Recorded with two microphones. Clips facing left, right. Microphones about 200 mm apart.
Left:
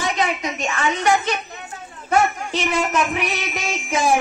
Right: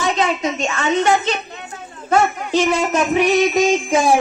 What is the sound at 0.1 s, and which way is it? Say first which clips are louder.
A woman's voice: right 4 dB; 30° right (ahead or behind).